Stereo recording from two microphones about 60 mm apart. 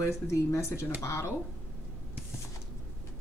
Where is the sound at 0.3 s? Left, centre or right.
Left.